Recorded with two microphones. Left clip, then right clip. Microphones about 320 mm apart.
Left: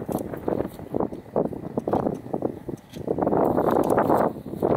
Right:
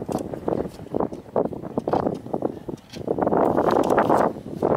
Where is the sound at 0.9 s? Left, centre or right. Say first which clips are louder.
Right 2 dB; centre.